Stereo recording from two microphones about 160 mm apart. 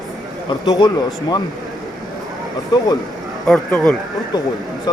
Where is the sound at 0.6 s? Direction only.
25° left (ahead or behind).